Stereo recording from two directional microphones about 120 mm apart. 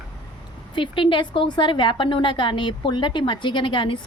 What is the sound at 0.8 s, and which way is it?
A woman's voice, 45° left (ahead or behind).